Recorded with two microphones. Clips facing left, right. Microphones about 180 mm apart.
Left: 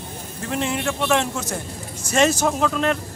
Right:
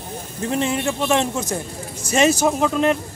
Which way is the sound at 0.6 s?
20° right (ahead or behind).